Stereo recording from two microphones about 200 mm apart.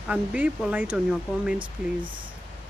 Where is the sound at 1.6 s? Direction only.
25° right (ahead or behind).